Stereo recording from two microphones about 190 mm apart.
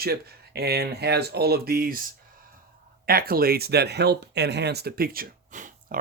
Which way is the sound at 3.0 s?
50° right (ahead or behind).